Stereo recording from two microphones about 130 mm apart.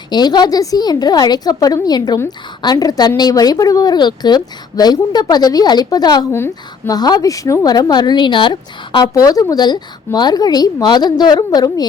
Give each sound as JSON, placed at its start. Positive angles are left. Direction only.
{"t": 0.1, "sound": "a woman's voice", "side_deg": 30}
{"t": 6.3, "sound": "a woman's voice", "side_deg": 20}
{"t": 6.9, "sound": "speech", "side_deg": 30}